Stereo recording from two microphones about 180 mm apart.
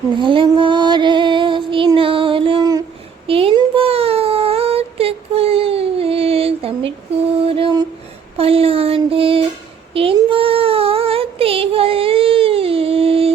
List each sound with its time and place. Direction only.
0.2 s music: 25° right (ahead or behind)
3.2 s a sound: 30° right (ahead or behind)
9.9 s child singing: 30° right (ahead or behind)